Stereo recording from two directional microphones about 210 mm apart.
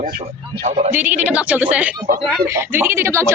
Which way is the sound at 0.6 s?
35° right (ahead or behind).